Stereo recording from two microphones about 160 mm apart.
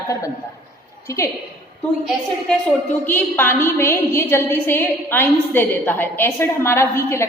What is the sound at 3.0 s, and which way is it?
A woman's voice, 15° left (ahead or behind).